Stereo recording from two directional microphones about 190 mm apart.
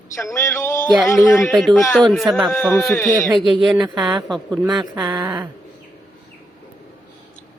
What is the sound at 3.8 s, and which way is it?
Speech, 20° right (ahead or behind).